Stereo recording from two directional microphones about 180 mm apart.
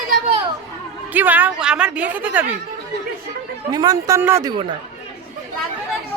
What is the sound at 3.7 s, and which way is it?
Speech, 20° right (ahead or behind).